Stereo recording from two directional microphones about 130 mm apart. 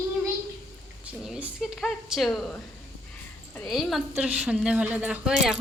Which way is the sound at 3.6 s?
Centre (ahead or behind).